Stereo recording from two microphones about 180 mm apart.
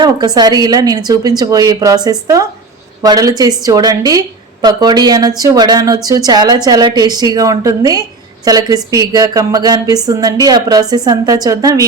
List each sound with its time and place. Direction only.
0.0 s speech: 25° right (ahead or behind)